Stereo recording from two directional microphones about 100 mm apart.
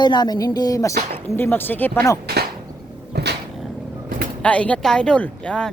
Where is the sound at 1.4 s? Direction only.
20° left (ahead or behind).